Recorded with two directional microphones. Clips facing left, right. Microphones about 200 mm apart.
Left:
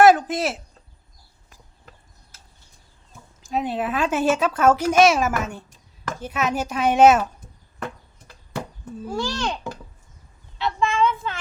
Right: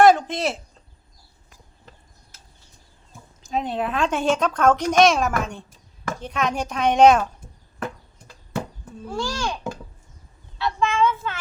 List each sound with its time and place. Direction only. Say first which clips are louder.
0.0 s a sound: left 1 dB; 5° left (ahead or behind)
3.4 s speech: even; 5° left (ahead or behind)
9.0 s a child's voice: left 1 dB; centre (ahead or behind)
10.6 s child singing: even; 15° left (ahead or behind)